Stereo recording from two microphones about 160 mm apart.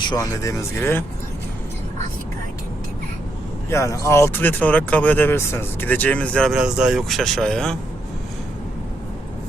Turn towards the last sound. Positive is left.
turn(degrees=5)  # may be behind; listen again after turning